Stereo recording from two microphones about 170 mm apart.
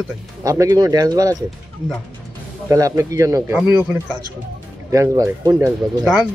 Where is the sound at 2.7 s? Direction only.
20° right (ahead or behind).